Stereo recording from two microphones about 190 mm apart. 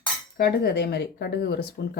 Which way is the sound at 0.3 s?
55° left (ahead or behind).